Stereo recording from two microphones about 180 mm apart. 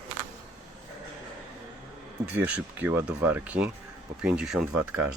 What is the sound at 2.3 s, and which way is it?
Speech, 10° right (ahead or behind).